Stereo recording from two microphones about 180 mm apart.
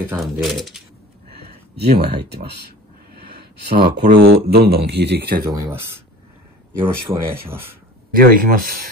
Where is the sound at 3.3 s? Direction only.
65° right (ahead or behind); by 4.4 s 85° right.